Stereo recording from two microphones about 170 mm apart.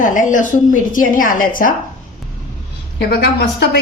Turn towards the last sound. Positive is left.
turn(degrees=75)  # may be behind; listen again after turning